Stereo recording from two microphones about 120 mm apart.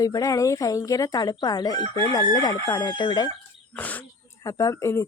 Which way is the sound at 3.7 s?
15° left (ahead or behind).